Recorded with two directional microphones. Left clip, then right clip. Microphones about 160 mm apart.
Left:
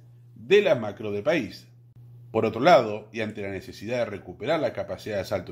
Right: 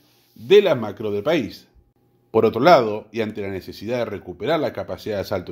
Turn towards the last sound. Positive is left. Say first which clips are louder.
# right 4 dB
turn(degrees=-35)  # may be behind; listen again after turning